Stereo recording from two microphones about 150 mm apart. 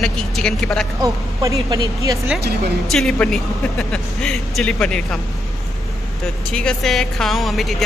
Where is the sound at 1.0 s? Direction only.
20° right (ahead or behind).